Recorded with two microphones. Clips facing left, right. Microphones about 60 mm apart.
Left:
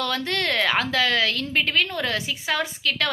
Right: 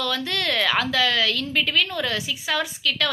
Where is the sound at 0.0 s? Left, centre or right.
Left.